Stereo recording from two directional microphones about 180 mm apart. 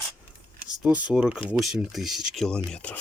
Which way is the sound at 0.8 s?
5° right (ahead or behind).